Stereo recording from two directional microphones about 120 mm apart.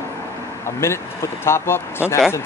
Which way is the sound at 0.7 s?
20° left (ahead or behind).